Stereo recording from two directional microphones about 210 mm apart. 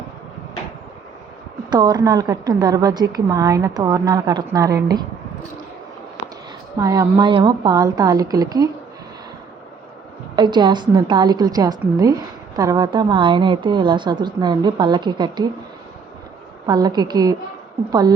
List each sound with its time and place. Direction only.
1.7 s a woman's voice: 20° right (ahead or behind)
6.7 s a woman's voice: 15° right (ahead or behind)
10.3 s a woman's voice: 20° right (ahead or behind)
16.6 s a woman's voice: 20° right (ahead or behind)